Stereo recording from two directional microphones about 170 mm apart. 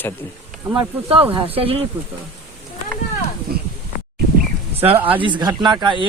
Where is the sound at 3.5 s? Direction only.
65° right (ahead or behind).